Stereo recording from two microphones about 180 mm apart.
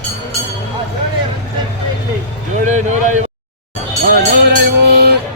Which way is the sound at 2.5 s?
40° right (ahead or behind).